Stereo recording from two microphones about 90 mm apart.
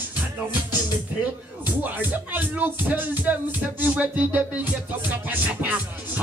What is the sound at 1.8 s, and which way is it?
Music, 20° right (ahead or behind).